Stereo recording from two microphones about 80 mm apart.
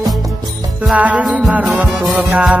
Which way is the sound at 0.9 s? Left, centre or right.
Centre.